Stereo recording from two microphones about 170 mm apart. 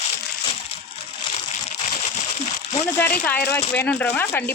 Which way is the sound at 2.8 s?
15° left (ahead or behind).